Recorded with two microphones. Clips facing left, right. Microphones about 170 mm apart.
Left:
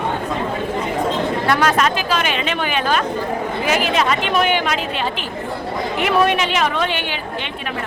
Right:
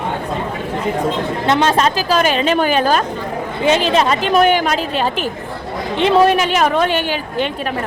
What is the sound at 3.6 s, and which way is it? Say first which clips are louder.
A woman's voice: right 5 dB; 30° right (ahead or behind).